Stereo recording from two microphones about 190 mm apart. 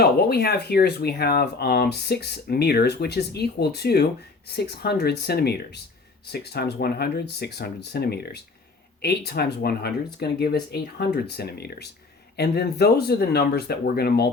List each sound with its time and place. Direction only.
0.0 s speech: 55° left (ahead or behind)